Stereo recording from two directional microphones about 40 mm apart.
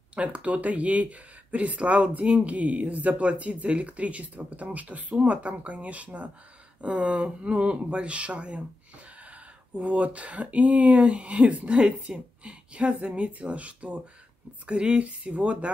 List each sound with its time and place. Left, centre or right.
0.1 s speech: right